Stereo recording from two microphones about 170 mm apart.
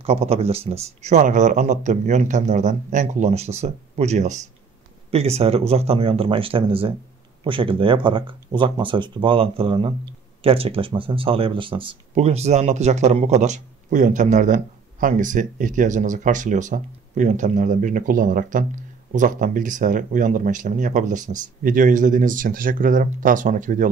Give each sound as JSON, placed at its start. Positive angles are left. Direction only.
{"t": 0.0, "sound": "speech", "side_deg": -35}